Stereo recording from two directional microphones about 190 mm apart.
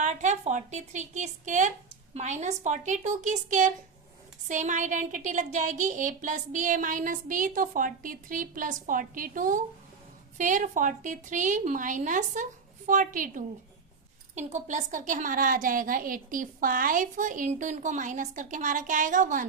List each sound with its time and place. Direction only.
0.0 s a woman's voice: 40° right (ahead or behind)